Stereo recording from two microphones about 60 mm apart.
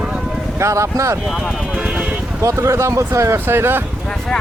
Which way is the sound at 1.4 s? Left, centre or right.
Centre.